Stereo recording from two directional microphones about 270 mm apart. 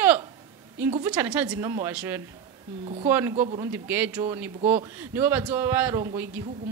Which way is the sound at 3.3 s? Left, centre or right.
Right.